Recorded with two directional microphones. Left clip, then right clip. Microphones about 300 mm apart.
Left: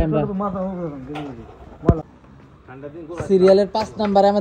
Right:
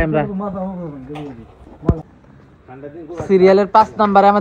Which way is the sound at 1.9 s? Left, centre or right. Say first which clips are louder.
Left 1 dB; centre.